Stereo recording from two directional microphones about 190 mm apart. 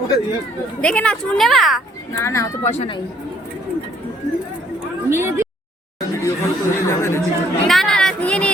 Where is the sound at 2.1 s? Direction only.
15° left (ahead or behind).